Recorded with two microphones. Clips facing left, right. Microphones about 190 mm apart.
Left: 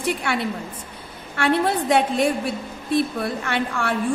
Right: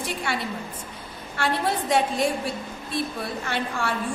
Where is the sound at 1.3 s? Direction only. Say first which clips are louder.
Left 5 dB; 60° left (ahead or behind).